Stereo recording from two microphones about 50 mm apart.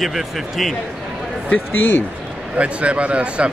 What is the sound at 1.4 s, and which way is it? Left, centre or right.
Speech, left.